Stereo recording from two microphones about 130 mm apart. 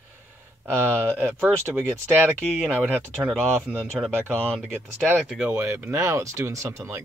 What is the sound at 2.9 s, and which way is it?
Speech, 15° right (ahead or behind).